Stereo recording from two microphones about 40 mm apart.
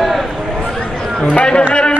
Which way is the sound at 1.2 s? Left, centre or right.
Left.